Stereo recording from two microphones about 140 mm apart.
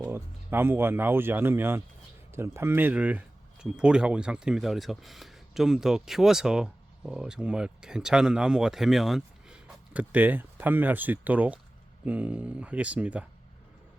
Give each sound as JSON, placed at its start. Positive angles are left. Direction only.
{"t": 0.0, "sound": "speech", "side_deg": -15}